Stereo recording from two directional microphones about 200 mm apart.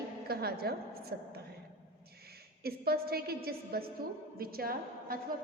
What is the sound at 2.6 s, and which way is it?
A woman's voice, 50° right (ahead or behind).